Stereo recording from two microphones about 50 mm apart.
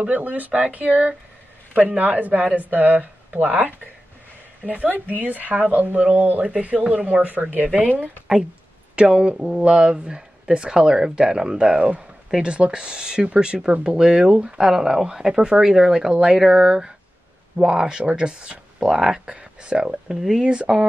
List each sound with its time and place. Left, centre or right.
0.0 s speech: right; by 20.4 s centre
20.4 s speech: centre